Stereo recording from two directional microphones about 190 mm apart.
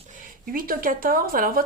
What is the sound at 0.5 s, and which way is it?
A woman's voice, 50° right (ahead or behind).